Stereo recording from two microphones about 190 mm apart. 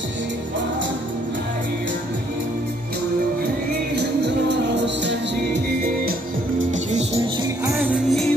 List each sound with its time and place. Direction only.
3.9 s music: 60° right (ahead or behind)
6.7 s music: 40° right (ahead or behind)
7.7 s music: 5° right (ahead or behind)